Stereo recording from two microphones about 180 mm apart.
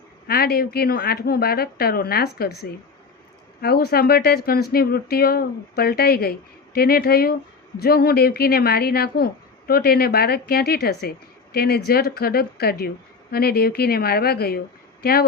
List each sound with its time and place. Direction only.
0.3 s speech: 60° left (ahead or behind)